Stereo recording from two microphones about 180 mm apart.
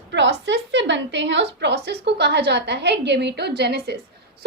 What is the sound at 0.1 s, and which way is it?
A woman's voice, 80° right.